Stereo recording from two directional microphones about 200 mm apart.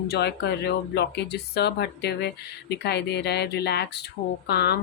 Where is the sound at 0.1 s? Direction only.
55° left (ahead or behind).